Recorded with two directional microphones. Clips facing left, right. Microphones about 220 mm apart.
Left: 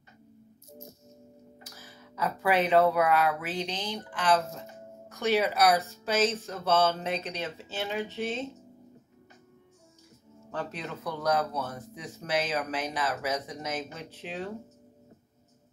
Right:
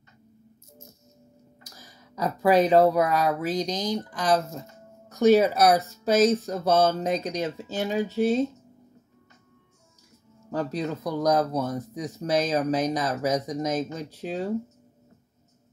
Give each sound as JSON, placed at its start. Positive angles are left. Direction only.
{"t": 1.8, "sound": "speech", "side_deg": -40}
{"t": 10.5, "sound": "speech", "side_deg": -40}